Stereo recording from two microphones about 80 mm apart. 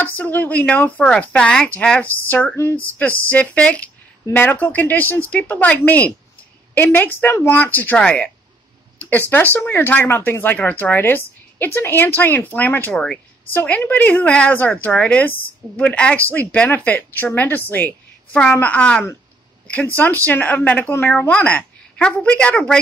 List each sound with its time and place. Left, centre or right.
0.0 s a woman's voice: centre
9.3 s speech: left
12.9 s a woman's voice: centre
13.5 s a woman's voice: left
20.2 s a woman's voice: left